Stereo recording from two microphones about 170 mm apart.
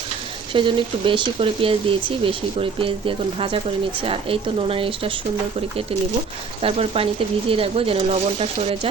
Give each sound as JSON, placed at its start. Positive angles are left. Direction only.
{"t": 0.5, "sound": "speech", "side_deg": -30}
{"t": 6.6, "sound": "speech", "side_deg": -35}